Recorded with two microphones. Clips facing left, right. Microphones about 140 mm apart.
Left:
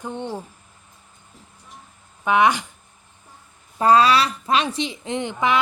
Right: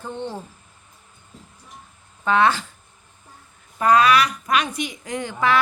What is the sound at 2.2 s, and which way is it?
Speech, 15° left (ahead or behind).